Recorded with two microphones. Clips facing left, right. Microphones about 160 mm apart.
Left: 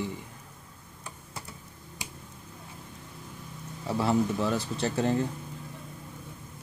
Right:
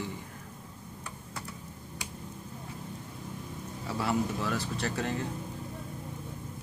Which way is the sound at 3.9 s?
25° left (ahead or behind).